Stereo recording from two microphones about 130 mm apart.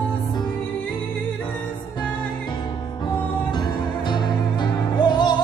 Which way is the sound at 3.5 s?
35° left (ahead or behind).